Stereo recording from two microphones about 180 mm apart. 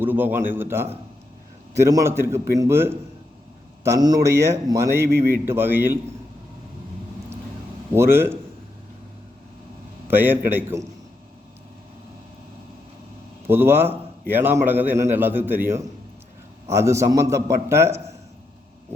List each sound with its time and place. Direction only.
0.0 s a man's voice: 10° right (ahead or behind)
7.9 s a man's voice: 15° right (ahead or behind)
10.1 s a man's voice: 10° right (ahead or behind)
13.5 s a man's voice: 10° right (ahead or behind)